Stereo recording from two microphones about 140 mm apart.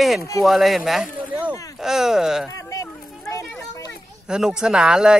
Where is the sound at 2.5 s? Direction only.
25° left (ahead or behind).